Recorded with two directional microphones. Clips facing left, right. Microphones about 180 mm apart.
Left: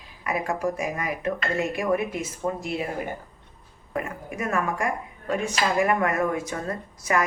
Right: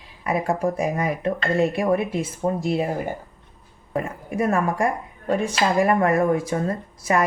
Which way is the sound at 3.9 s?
35° right (ahead or behind).